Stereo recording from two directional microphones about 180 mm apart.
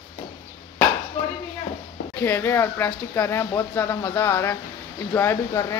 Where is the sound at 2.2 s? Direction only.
15° left (ahead or behind).